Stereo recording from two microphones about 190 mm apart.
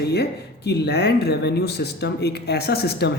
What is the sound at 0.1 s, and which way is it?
Speech, 60° left (ahead or behind).